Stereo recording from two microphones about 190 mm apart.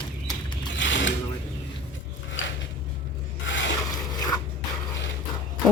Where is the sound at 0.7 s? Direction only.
75° left (ahead or behind).